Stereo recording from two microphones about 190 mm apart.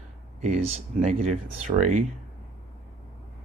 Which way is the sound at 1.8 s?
40° right (ahead or behind).